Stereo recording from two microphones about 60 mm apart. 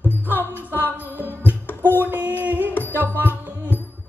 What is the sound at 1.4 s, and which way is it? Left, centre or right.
Music, left.